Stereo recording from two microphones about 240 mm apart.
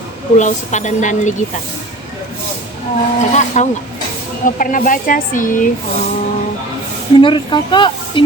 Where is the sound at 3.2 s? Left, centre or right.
Left.